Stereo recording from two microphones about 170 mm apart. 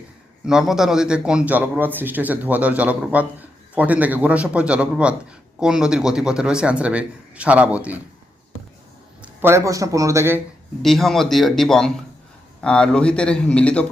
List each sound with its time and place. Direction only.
0.4 s a man's voice: 5° right (ahead or behind)
9.2 s a man's voice: 15° right (ahead or behind)
10.8 s a man's voice: centre (ahead or behind)